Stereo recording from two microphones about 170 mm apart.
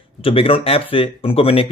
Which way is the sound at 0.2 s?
35° left (ahead or behind).